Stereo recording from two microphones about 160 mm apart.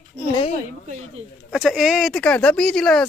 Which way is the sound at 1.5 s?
Centre (ahead or behind).